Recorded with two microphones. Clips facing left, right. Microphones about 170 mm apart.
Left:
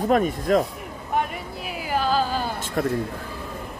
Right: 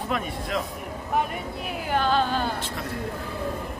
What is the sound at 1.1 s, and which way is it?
Speech, centre (ahead or behind).